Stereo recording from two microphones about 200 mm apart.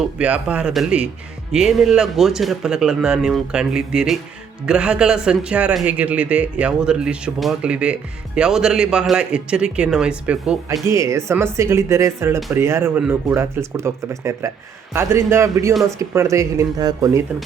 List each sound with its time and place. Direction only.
0.0 s speech: 5° right (ahead or behind)